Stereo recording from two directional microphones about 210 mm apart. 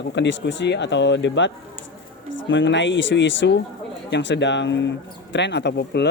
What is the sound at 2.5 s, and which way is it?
Speech, 60° left (ahead or behind).